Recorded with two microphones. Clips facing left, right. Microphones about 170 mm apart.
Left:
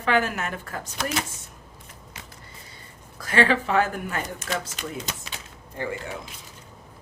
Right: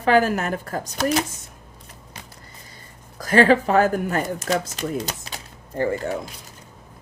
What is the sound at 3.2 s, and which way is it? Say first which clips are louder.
Speech: right 6 dB; 40° right (ahead or behind).